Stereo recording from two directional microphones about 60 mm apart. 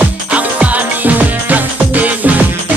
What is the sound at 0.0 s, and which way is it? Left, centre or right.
Music, right.